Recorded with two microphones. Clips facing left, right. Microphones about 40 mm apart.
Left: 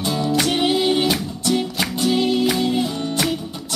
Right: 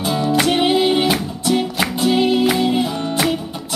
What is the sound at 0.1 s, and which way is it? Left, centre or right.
Music, centre.